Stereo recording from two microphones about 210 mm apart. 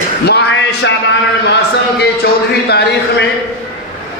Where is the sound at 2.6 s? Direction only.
50° left (ahead or behind).